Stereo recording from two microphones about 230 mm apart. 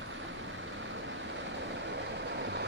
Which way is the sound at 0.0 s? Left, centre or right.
Right.